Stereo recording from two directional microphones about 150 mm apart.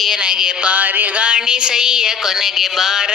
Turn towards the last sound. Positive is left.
turn(degrees=-5)  # may be behind; listen again after turning